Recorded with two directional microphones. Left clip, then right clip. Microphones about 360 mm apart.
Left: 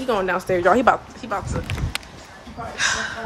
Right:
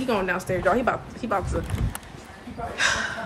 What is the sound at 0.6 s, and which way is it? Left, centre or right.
Speech, left.